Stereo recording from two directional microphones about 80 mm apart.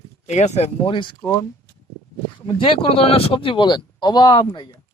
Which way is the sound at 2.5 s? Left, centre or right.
Left.